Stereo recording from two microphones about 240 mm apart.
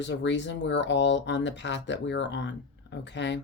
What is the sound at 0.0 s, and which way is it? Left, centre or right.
Speech, left.